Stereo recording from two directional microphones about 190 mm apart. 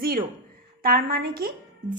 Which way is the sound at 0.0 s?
50° right (ahead or behind).